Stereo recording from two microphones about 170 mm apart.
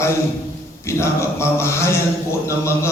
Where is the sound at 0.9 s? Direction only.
15° left (ahead or behind).